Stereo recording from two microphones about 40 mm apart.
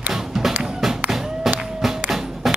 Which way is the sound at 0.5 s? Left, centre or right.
Right.